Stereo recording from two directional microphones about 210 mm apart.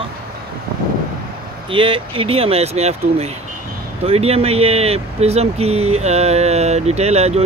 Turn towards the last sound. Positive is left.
turn(degrees=-30)  # may be behind; listen again after turning